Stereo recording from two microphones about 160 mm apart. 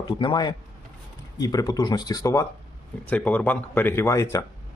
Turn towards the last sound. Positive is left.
turn(degrees=20)  # may be behind; listen again after turning